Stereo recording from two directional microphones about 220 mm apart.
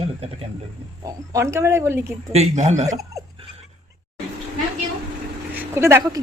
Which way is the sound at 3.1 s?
25° right (ahead or behind).